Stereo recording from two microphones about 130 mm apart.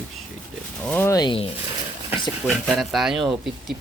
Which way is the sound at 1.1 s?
35° left (ahead or behind).